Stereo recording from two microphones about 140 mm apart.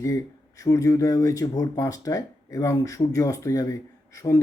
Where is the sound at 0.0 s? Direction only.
25° left (ahead or behind).